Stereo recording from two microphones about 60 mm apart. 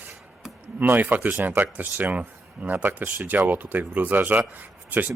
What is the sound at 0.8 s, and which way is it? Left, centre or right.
Speech, right.